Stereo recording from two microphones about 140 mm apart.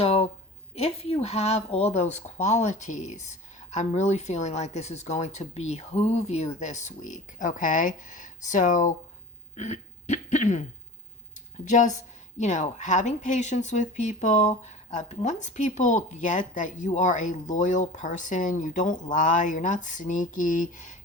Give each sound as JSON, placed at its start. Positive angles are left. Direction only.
{"t": 0.0, "sound": "a sound", "side_deg": 45}
{"t": 0.8, "sound": "speech", "side_deg": 45}
{"t": 9.6, "sound": "throat clearing", "side_deg": 60}
{"t": 11.6, "sound": "speech", "side_deg": 60}